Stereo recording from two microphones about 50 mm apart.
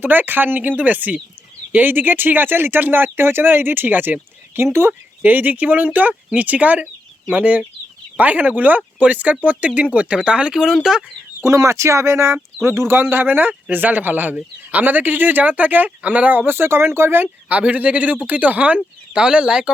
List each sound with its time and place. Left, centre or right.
0.0 s speech: right
5.2 s speech: right; by 10.8 s centre
11.4 s speech: right
16.5 s speech: right
17.5 s speech: right
19.1 s speech: centre